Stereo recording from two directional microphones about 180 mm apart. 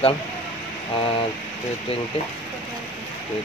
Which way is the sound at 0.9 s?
25° left (ahead or behind).